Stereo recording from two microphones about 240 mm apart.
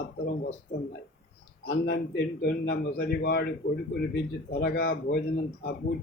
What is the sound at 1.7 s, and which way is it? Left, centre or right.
A man's voice, left.